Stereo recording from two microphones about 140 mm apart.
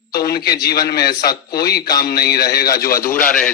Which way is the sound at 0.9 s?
90° left.